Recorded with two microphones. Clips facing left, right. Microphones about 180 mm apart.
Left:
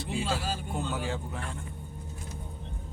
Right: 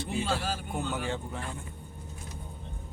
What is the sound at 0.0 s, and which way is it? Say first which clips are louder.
Speech: right 1 dB; centre (ahead or behind).